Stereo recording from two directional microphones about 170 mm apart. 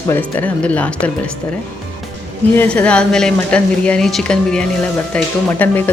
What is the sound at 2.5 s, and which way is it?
A woman's voice, 10° left (ahead or behind).